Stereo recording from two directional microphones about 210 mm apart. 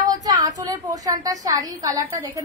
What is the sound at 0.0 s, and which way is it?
A woman's voice, 15° right (ahead or behind).